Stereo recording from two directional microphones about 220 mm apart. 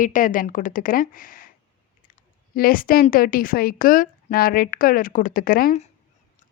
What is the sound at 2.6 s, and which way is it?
Speech, 40° left (ahead or behind).